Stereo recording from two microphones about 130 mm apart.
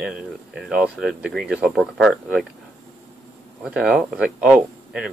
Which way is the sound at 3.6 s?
10° right (ahead or behind).